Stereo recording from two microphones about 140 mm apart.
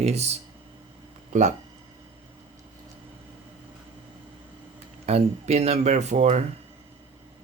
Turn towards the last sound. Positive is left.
turn(degrees=-55)  # may be behind; listen again after turning